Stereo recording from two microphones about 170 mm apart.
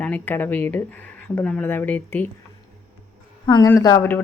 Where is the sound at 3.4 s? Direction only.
25° left (ahead or behind).